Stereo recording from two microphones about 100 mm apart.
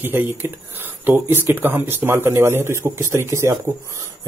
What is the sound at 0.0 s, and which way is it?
Speech, 20° right (ahead or behind).